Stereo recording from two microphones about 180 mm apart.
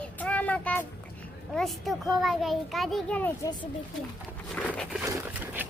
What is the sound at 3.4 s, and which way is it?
Speech, 25° left (ahead or behind).